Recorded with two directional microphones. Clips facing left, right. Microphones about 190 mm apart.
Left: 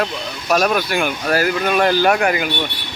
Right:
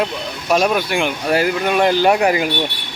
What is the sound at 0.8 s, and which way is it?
Speech, 25° right (ahead or behind).